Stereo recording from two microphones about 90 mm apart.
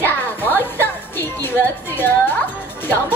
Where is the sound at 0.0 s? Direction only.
20° left (ahead or behind).